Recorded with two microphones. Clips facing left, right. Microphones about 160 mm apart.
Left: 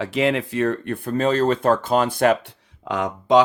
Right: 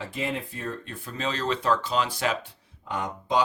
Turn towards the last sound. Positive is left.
turn(degrees=90)